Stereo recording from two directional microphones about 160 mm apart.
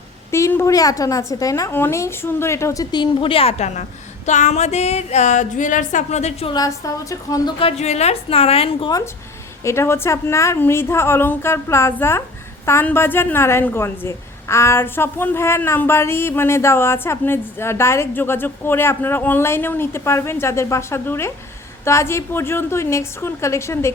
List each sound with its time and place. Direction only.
0.3 s a woman's voice: 15° left (ahead or behind); by 3.8 s 45° left (ahead or behind)
4.3 s a sound: 50° left (ahead or behind)
6.5 s a woman's voice: 20° left (ahead or behind)
7.6 s a woman's voice: 40° left (ahead or behind)
9.6 s a woman's voice: 15° left (ahead or behind)